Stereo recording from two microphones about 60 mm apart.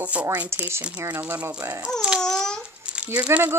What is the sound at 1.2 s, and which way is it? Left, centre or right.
Speech, right.